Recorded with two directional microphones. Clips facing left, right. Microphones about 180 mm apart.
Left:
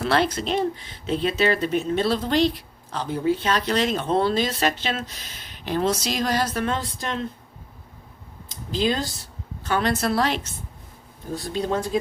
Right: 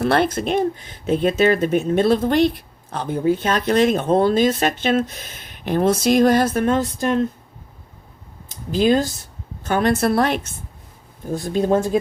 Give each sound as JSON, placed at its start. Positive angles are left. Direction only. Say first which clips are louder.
{"t": 0.0, "sound": "speech", "louder": "right 4 dB", "side_deg": -50}
{"t": 8.4, "sound": "speech", "louder": "right 7 dB", "side_deg": -50}